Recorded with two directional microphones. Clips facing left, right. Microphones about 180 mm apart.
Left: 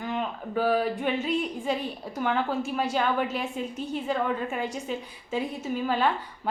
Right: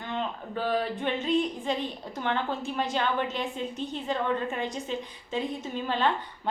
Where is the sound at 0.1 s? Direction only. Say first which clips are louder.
Left 1 dB; 10° left (ahead or behind).